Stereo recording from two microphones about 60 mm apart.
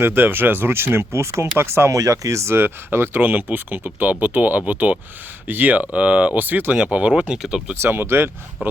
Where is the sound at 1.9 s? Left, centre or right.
Right.